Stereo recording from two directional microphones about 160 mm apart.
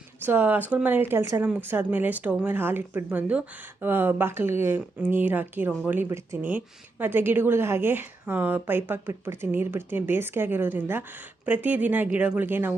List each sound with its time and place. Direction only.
0.2 s speech: 10° right (ahead or behind)